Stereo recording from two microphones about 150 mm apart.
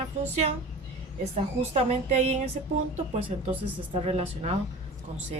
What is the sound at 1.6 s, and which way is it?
A woman's voice, 45° right (ahead or behind).